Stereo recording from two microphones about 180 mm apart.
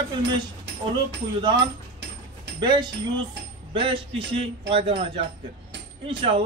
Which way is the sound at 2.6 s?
25° right (ahead or behind).